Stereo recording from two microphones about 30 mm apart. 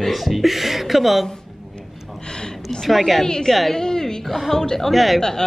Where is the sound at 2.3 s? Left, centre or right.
Left.